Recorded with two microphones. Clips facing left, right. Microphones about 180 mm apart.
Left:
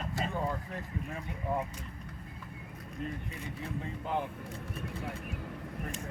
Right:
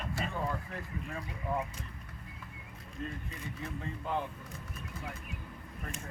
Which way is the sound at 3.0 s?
15° left (ahead or behind).